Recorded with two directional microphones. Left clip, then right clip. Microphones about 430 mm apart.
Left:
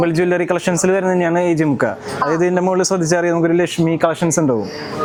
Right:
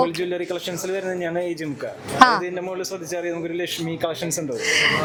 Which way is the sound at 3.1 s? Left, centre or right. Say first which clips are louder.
Left 10 dB; left.